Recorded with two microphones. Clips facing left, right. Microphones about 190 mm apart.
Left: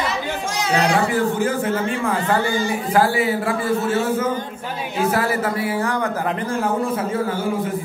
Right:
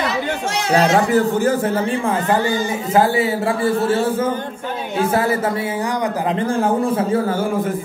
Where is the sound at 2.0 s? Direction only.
20° right (ahead or behind).